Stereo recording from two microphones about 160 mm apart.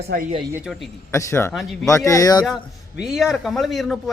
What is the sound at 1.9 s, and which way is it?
Speech, 20° left (ahead or behind).